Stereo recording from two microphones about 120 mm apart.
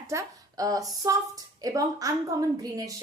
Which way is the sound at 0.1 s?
25° right (ahead or behind).